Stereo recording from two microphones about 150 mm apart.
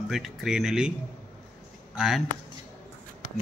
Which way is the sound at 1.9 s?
5° right (ahead or behind).